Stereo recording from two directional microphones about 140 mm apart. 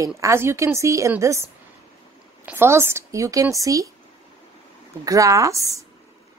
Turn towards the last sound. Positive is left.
turn(degrees=-25)  # may be behind; listen again after turning